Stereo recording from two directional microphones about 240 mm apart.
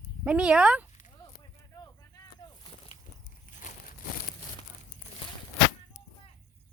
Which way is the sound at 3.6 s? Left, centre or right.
Left.